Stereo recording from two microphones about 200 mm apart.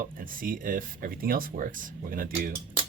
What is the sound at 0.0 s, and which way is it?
Speech, 45° right (ahead or behind).